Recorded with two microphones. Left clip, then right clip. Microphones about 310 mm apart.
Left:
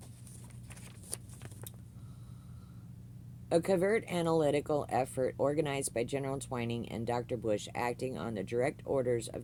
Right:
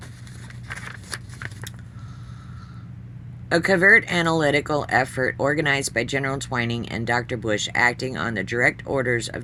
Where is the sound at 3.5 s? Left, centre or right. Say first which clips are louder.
Right 14 dB; left.